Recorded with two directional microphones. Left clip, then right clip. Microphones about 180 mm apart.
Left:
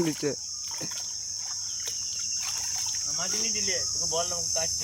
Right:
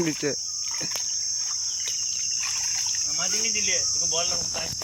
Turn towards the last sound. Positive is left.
turn(degrees=25)  # may be behind; listen again after turning